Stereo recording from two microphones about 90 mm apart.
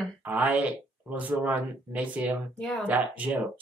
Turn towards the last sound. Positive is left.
turn(degrees=-15)  # may be behind; listen again after turning